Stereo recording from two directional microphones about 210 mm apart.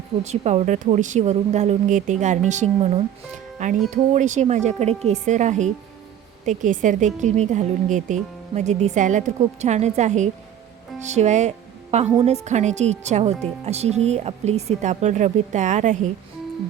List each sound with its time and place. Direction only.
0.3 s a woman's voice: 30° right (ahead or behind)